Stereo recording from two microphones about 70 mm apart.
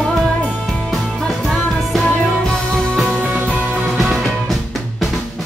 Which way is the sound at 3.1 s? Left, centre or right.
Right.